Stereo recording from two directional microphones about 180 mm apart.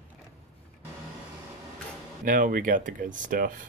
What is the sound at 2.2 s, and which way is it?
Speech, 50° right (ahead or behind).